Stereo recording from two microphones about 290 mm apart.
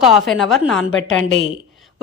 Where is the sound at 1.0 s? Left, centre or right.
Left.